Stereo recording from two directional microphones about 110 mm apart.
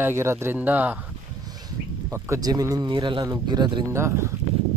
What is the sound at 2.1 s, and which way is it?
Speech, 30° right (ahead or behind).